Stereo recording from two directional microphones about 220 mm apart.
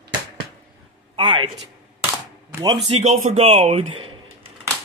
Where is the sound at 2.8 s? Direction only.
30° right (ahead or behind).